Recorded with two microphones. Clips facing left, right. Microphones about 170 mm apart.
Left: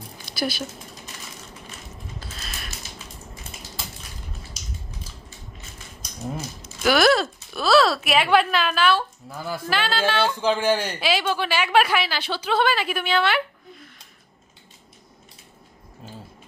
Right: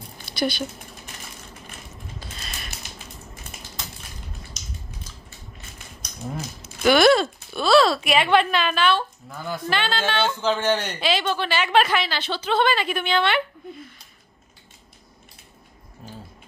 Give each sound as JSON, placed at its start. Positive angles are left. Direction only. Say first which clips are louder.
{"t": 0.3, "sound": "speech", "louder": "right 2 dB", "side_deg": 5}
{"t": 2.2, "sound": "a sound", "louder": "even", "side_deg": 0}
{"t": 6.8, "sound": "speech", "louder": "right 2 dB", "side_deg": 0}